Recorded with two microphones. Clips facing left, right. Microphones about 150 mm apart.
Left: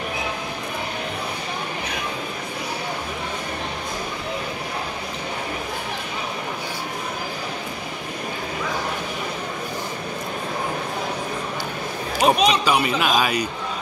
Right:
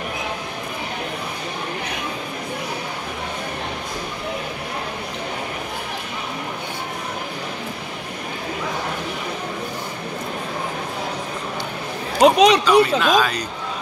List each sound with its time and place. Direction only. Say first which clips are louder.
12.2 s a man's voice: right 5 dB; 90° right
12.6 s speech: right 5 dB; 10° left (ahead or behind)